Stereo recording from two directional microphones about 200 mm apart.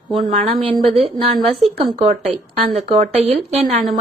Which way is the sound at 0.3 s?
35° right (ahead or behind).